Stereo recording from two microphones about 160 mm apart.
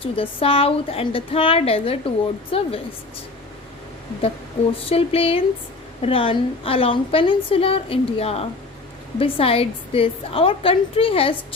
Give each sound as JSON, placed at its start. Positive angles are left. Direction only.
{"t": 0.0, "sound": "a woman's voice", "side_deg": 35}
{"t": 4.7, "sound": "a woman's voice", "side_deg": 35}